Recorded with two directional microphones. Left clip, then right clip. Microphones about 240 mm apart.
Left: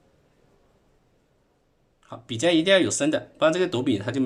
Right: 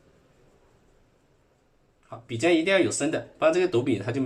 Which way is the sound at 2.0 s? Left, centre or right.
Left.